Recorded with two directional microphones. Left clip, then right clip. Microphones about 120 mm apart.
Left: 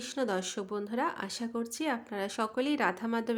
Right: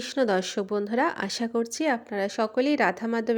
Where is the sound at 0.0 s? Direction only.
60° right (ahead or behind).